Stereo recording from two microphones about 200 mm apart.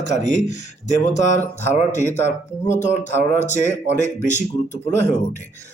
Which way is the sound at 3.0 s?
35° left (ahead or behind).